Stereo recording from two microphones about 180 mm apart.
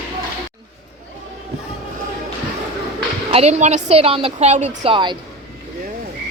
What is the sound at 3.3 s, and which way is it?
A woman's voice, 35° right (ahead or behind).